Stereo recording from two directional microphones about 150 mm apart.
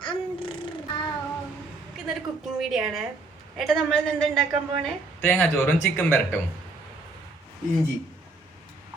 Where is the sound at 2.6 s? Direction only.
Centre (ahead or behind); by 6.2 s 15° left (ahead or behind).